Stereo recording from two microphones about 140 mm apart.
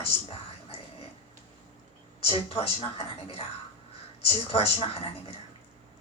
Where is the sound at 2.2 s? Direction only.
40° left (ahead or behind).